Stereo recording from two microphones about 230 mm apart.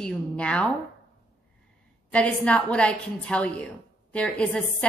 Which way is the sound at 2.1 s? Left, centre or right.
Centre.